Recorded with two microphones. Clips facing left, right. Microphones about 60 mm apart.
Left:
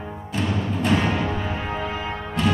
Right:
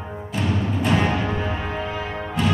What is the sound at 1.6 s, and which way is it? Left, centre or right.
Music, centre.